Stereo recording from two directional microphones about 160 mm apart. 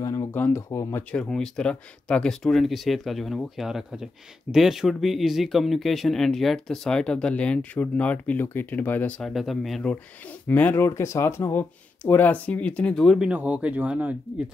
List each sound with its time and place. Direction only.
0.0 s speech: 20° left (ahead or behind)
1.1 s speech: 5° left (ahead or behind)
13.3 s speech: 10° right (ahead or behind)